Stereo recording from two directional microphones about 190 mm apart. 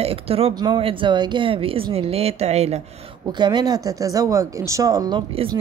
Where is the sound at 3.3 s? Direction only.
25° right (ahead or behind).